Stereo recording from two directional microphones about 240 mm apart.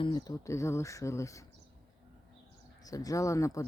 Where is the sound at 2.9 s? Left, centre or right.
Centre.